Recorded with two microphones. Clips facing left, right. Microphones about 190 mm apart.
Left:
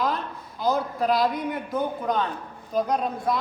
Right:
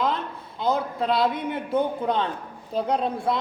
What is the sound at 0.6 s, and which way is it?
A man's voice, 25° right (ahead or behind).